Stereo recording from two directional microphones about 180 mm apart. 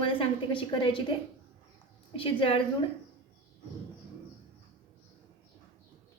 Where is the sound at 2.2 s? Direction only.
30° left (ahead or behind).